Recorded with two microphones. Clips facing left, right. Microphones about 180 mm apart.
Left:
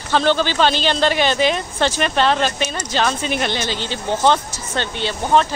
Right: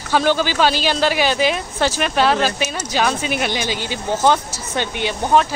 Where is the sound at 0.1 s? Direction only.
10° right (ahead or behind).